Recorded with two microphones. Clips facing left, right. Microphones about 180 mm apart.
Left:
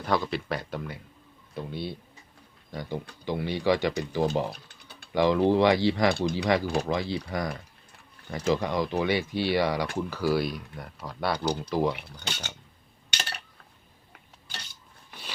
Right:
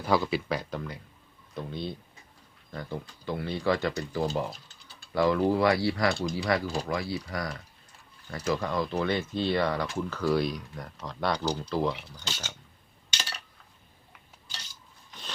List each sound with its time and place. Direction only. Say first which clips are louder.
0.0 s speech: right 1 dB; 5° right (ahead or behind)
3.2 s speech: left 3 dB; 15° left (ahead or behind)
4.7 s typing: left 4 dB; 60° left (ahead or behind)
5.1 s speech: left 2 dB; 20° left (ahead or behind); by 11.4 s 5° left (ahead or behind)
11.4 s speech: left 2 dB; 15° left (ahead or behind)
11.9 s speech: left 2 dB; 60° left (ahead or behind)
13.1 s a sound: left 2 dB; 60° left (ahead or behind)